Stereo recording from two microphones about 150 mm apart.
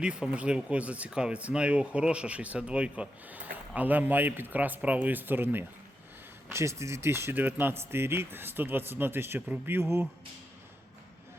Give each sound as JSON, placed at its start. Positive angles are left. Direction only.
{"t": 0.0, "sound": "speech", "side_deg": -5}